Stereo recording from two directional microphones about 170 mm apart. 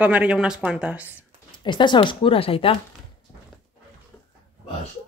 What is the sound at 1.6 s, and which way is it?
Speech, 25° left (ahead or behind).